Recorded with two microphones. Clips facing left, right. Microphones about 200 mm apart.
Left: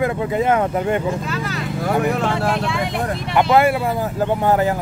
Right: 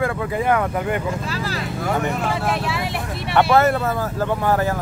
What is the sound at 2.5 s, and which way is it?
Speech, 5° right (ahead or behind).